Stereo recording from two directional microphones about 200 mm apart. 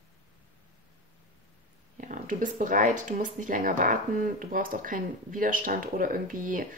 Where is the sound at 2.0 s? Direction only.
40° right (ahead or behind).